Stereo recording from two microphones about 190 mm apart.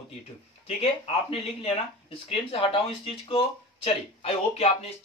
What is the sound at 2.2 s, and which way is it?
Speech, 30° left (ahead or behind).